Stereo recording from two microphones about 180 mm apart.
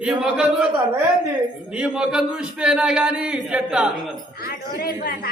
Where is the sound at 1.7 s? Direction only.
5° right (ahead or behind).